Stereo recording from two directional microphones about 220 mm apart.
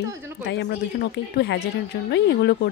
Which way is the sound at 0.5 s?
50° left (ahead or behind).